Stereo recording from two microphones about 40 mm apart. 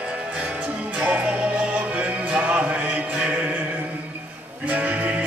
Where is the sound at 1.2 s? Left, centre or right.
Right.